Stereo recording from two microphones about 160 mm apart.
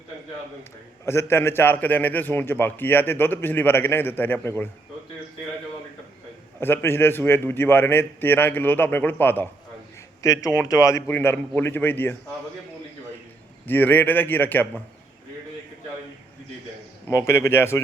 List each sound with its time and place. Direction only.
1.0 s a man's voice: 15° left (ahead or behind)
6.6 s a man's voice: 15° left (ahead or behind)
13.7 s a man's voice: 10° left (ahead or behind)
17.1 s a man's voice: 15° left (ahead or behind)